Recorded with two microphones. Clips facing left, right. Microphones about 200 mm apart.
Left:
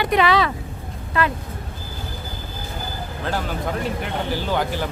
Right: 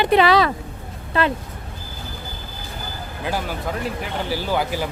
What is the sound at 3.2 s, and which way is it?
Speech, 5° right (ahead or behind).